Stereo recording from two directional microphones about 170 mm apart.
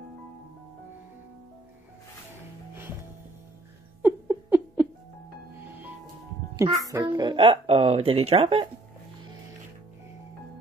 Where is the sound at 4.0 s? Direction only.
10° right (ahead or behind).